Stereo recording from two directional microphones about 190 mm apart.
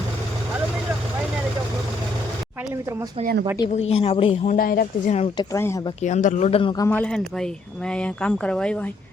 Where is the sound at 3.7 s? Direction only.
35° left (ahead or behind).